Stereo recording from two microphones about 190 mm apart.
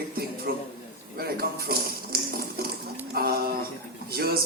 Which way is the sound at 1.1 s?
50° right (ahead or behind).